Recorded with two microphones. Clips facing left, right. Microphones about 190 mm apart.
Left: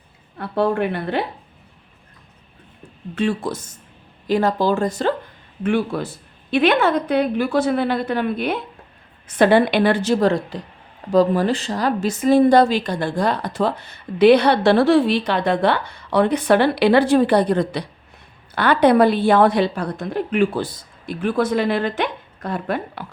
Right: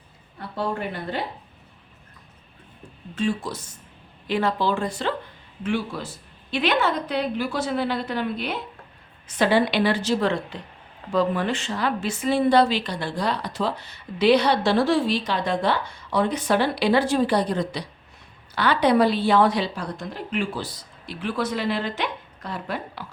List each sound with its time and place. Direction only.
0.3 s speech: 65° left (ahead or behind)
3.2 s a woman's voice: 60° left (ahead or behind); by 5.1 s 45° left (ahead or behind)
5.6 s a woman's voice: 55° left (ahead or behind)